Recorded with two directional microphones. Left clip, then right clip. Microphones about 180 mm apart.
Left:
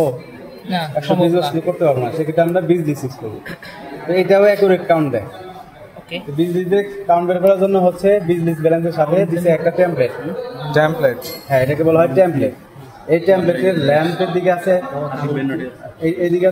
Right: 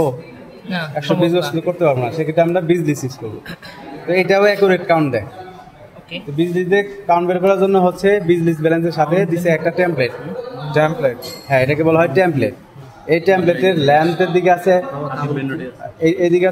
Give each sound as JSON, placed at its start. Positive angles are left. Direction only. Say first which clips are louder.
{"t": 0.7, "sound": "a man's voice", "louder": "left 2 dB", "side_deg": 5}
{"t": 1.3, "sound": "a man's voice", "louder": "left 1 dB", "side_deg": -60}
{"t": 4.1, "sound": "a man's voice", "louder": "left 1 dB", "side_deg": -55}
{"t": 6.3, "sound": "a man's voice", "louder": "right 1 dB", "side_deg": -50}
{"t": 10.7, "sound": "speech", "louder": "left 1 dB", "side_deg": 5}
{"t": 11.4, "sound": "a man's voice", "louder": "even", "side_deg": -50}